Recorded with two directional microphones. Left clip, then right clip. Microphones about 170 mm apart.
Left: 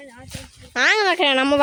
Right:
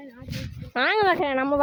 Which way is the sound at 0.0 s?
15° left (ahead or behind).